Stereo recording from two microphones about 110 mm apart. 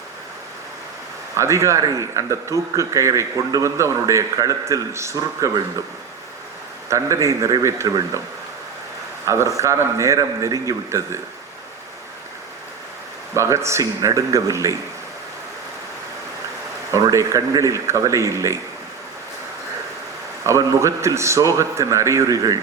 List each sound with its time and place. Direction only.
1.4 s speech: 25° right (ahead or behind)
6.9 s speech: 25° right (ahead or behind)
9.2 s a man's voice: 25° right (ahead or behind)
13.3 s speech: 25° right (ahead or behind)
16.9 s speech: 30° right (ahead or behind)
20.5 s speech: 25° right (ahead or behind)